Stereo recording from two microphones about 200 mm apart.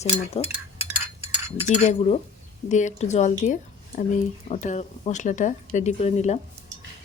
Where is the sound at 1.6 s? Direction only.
35° left (ahead or behind).